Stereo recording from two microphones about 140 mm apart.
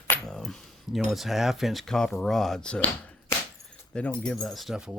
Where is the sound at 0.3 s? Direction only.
5° left (ahead or behind).